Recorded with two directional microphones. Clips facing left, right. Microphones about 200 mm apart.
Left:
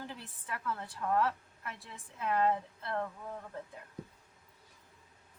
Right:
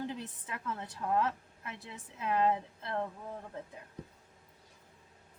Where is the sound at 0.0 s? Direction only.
20° right (ahead or behind).